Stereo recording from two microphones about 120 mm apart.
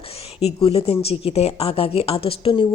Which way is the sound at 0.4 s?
55° left (ahead or behind).